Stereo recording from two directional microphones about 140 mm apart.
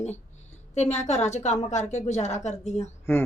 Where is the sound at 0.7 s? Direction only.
55° left (ahead or behind).